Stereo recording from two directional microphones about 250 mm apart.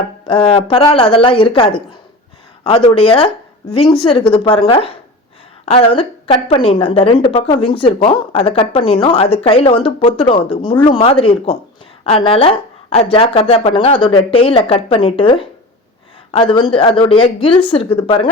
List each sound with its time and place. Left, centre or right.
0.3 s a woman's voice: left